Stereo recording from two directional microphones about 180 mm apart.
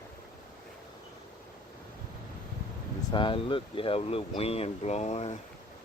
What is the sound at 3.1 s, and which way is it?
Speech, 25° left (ahead or behind).